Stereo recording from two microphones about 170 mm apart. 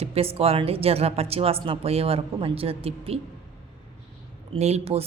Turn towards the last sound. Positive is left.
turn(degrees=-35)  # may be behind; listen again after turning